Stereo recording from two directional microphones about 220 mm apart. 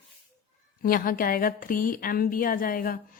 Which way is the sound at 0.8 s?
40° left (ahead or behind).